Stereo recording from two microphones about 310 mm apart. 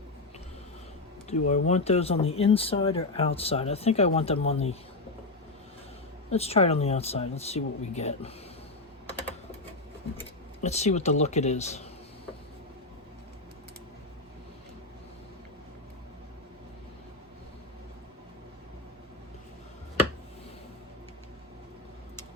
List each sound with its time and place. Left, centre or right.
1.3 s speech: left
6.3 s speech: centre
10.6 s speech: left